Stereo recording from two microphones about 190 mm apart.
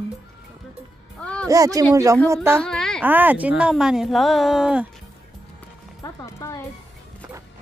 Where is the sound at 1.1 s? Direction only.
5° left (ahead or behind).